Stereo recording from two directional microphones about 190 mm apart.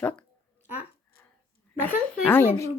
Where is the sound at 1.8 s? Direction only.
10° left (ahead or behind).